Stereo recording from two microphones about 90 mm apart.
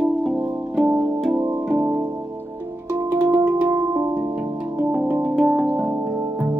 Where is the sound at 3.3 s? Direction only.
20° right (ahead or behind).